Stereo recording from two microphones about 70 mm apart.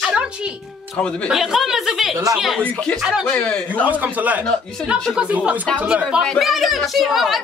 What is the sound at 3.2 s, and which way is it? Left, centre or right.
Speech, left.